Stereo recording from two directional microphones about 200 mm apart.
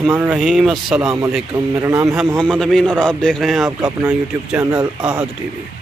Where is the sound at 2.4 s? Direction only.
Centre (ahead or behind).